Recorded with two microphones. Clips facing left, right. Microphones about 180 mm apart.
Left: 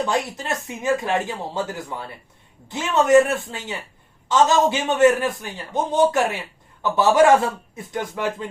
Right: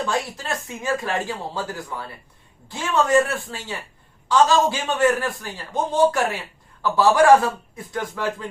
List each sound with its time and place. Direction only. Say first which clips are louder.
0.0 s speech: left 2 dB; 20° left (ahead or behind)